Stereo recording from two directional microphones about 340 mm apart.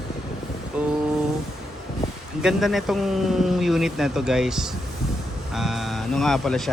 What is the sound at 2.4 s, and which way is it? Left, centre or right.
Speech, centre.